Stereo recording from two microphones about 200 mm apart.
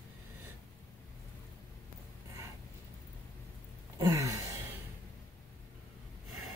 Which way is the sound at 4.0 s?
15° right (ahead or behind).